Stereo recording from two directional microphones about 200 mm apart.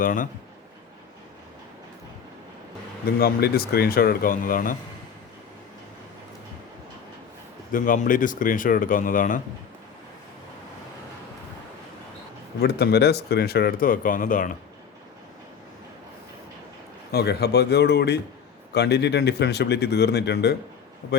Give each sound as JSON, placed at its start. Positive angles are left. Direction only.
{"t": 0.0, "sound": "speech", "side_deg": 40}
{"t": 3.2, "sound": "speech", "side_deg": 50}
{"t": 7.7, "sound": "speech", "side_deg": 40}
{"t": 12.5, "sound": "speech", "side_deg": 55}
{"t": 17.1, "sound": "speech", "side_deg": 55}